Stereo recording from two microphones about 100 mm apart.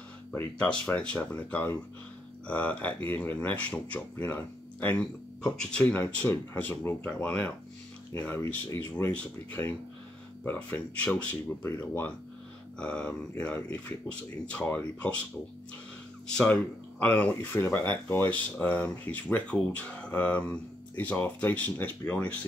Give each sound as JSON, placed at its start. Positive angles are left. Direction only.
{"t": 0.3, "sound": "speech", "side_deg": 10}
{"t": 12.7, "sound": "speech", "side_deg": 10}
{"t": 16.4, "sound": "speech", "side_deg": 15}